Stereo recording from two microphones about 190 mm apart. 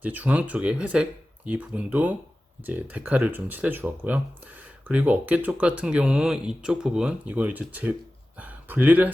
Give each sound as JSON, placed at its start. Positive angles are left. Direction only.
{"t": 0.0, "sound": "speech", "side_deg": -10}